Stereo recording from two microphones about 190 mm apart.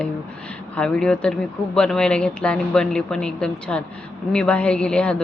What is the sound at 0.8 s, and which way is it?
Speech, 5° left (ahead or behind).